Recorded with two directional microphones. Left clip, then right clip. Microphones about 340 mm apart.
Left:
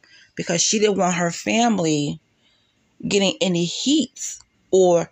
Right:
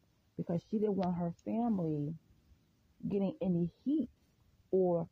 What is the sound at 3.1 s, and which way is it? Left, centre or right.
Speech, right.